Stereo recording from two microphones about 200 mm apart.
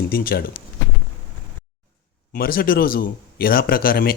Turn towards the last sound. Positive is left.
turn(degrees=50)  # may be behind; listen again after turning